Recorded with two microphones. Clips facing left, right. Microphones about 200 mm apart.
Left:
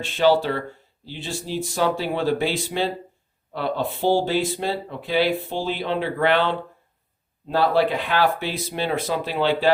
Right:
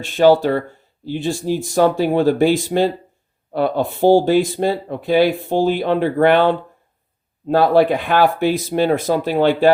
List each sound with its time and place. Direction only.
0.0 s speech: 45° right (ahead or behind)